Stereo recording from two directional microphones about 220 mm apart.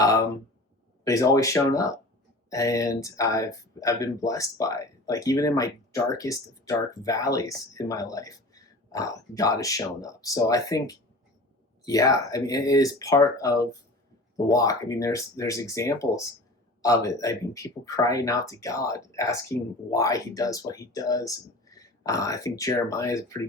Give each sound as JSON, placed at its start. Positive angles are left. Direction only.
{"t": 1.0, "sound": "speech", "side_deg": 15}